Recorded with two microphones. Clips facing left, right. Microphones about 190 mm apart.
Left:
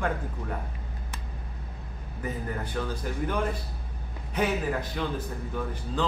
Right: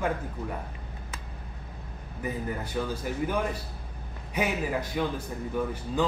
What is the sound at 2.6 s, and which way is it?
A man's voice, 10° right (ahead or behind).